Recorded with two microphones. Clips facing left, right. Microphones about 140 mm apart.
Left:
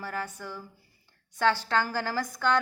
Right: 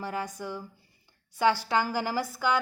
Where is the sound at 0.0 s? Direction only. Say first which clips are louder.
Right 2 dB; 20° right (ahead or behind).